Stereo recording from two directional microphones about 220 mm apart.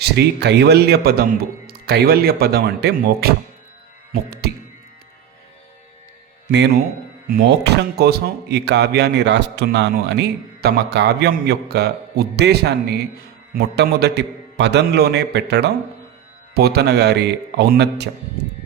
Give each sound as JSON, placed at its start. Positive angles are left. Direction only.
{"t": 0.0, "sound": "speech", "side_deg": -50}
{"t": 4.1, "sound": "music", "side_deg": -45}
{"t": 7.3, "sound": "speech", "side_deg": -45}